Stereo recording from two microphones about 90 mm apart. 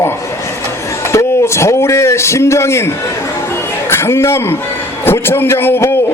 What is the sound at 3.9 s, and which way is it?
A man's voice, 30° left (ahead or behind).